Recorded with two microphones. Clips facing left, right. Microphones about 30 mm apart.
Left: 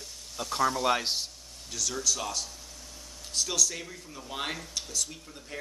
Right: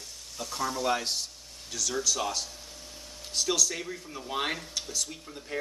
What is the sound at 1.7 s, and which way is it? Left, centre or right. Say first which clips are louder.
Speech: right 1 dB; centre.